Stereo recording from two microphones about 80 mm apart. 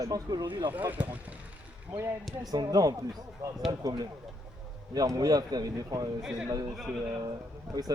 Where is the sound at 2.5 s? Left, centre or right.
Right.